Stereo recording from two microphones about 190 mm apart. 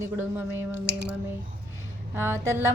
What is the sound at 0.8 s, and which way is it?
Speech, 60° right (ahead or behind).